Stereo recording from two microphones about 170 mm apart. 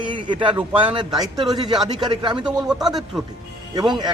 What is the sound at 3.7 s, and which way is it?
Speech, 25° right (ahead or behind).